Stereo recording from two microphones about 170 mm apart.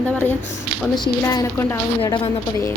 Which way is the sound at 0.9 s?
25° left (ahead or behind).